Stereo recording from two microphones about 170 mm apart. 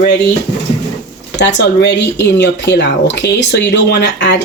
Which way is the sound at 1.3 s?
90° left.